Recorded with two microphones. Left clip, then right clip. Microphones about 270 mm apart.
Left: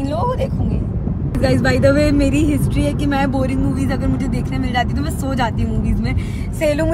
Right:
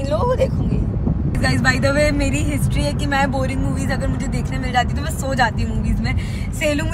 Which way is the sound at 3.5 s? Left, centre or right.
Centre.